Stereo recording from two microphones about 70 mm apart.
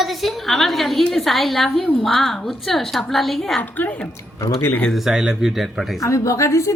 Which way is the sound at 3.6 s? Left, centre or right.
Left.